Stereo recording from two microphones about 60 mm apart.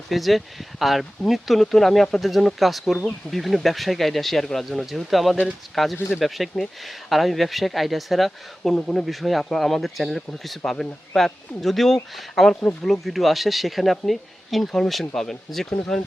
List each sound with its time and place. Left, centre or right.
0.1 s speech: centre
15.8 s speech: centre